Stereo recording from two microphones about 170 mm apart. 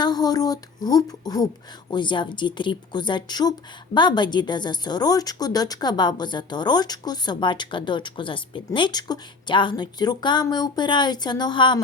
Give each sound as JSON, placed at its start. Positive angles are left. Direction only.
{"t": 0.0, "sound": "speech", "side_deg": 25}